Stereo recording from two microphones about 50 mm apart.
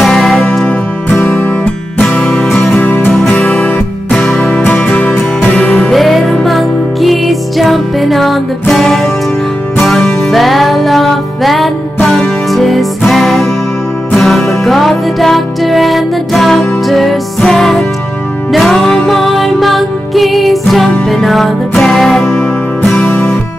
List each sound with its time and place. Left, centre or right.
0.0 s music: centre
2.0 s music: centre
2.5 s music: left
3.3 s music: left
4.2 s music: centre
5.4 s music: left
5.9 s music: centre
22.3 s music: left